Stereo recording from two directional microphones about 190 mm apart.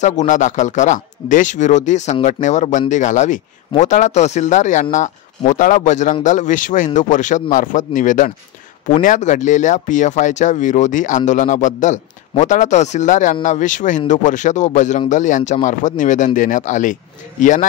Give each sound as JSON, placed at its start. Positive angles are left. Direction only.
{"t": 0.0, "sound": "speech", "side_deg": 40}